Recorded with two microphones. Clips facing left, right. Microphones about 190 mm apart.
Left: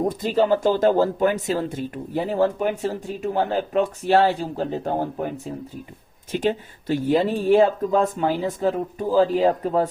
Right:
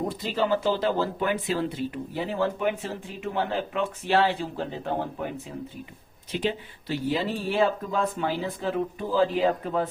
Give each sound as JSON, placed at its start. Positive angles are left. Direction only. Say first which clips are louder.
{"t": 0.1, "sound": "speech", "louder": "left 6 dB", "side_deg": 45}